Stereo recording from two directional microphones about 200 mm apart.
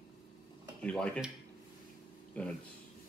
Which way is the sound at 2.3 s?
5° left (ahead or behind).